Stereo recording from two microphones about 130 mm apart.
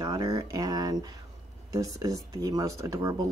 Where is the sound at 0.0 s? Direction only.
30° right (ahead or behind).